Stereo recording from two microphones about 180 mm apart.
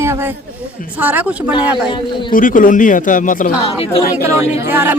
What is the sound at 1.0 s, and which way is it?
Speech, 10° right (ahead or behind).